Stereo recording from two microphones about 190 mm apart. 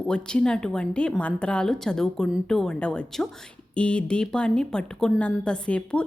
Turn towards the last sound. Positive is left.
turn(degrees=5)  # may be behind; listen again after turning